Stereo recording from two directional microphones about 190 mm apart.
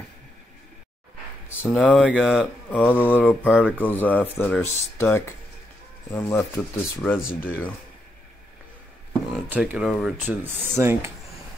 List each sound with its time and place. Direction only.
1.6 s speech: 5° left (ahead or behind)
9.3 s speech: 5° right (ahead or behind)
10.0 s rub: 10° right (ahead or behind)